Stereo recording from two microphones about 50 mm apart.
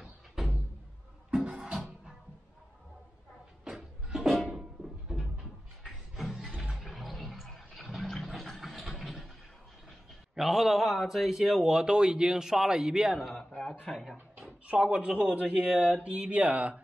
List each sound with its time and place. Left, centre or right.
1.3 s music: centre
3.7 s music: centre
4.6 s a sound: centre
10.3 s speech: centre
14.7 s speech: right